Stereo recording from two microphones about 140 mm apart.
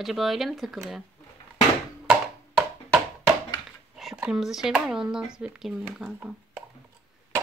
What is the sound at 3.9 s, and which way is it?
Speech, 5° right (ahead or behind).